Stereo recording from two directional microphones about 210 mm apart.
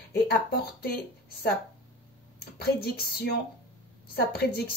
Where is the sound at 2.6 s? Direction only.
50° left (ahead or behind).